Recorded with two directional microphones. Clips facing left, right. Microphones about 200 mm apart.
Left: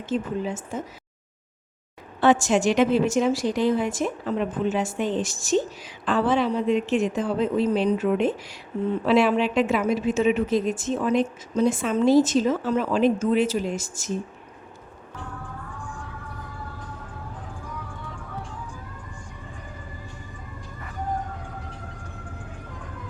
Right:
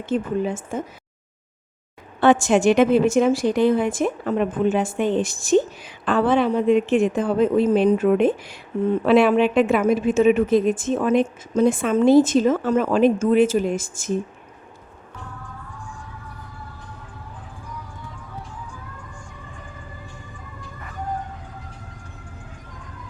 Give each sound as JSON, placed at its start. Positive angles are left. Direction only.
{"t": 0.0, "sound": "a woman's voice", "side_deg": -55}
{"t": 2.2, "sound": "a woman's voice", "side_deg": -55}